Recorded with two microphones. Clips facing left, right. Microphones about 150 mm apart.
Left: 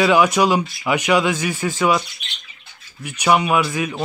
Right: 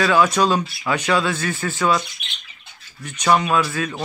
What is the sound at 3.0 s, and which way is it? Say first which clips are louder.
Speech: left 1 dB; 10° left (ahead or behind).